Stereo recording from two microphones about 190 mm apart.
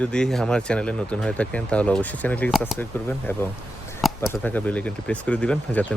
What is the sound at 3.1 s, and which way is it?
Speech, 10° left (ahead or behind).